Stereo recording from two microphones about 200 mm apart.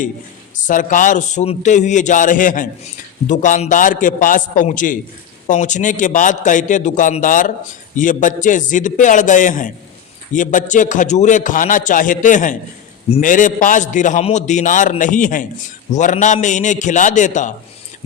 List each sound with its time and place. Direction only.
0.5 s a man's voice: 40° left (ahead or behind)